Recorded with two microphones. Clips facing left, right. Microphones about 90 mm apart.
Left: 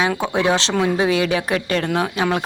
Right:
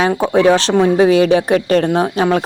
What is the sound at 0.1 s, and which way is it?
Speech, 35° right (ahead or behind).